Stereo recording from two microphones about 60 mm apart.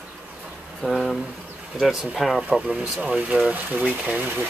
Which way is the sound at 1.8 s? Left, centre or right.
Centre.